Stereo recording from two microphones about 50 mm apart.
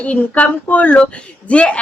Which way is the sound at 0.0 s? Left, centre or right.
Left.